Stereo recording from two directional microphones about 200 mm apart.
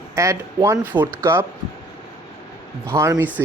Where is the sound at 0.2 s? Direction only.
15° right (ahead or behind).